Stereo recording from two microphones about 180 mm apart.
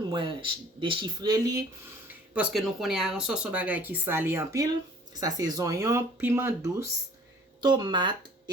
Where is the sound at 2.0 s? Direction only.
5° right (ahead or behind); by 8.1 s 25° right (ahead or behind).